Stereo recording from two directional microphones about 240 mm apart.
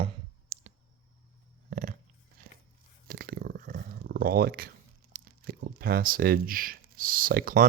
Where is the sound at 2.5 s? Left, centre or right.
Right.